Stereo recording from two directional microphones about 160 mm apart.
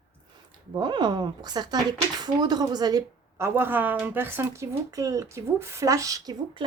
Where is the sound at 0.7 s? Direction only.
25° right (ahead or behind).